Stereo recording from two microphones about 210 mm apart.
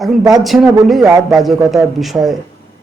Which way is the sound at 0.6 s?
15° right (ahead or behind).